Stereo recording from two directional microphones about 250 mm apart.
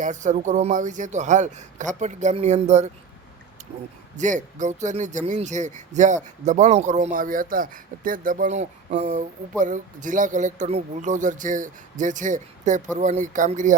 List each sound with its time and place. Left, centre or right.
0.0 s speech: right
4.2 s speech: right